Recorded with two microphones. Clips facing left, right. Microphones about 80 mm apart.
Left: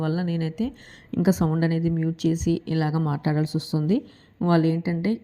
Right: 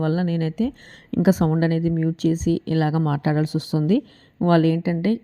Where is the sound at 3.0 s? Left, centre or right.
Right.